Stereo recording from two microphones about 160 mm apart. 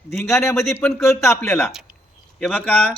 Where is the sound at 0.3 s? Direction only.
15° left (ahead or behind).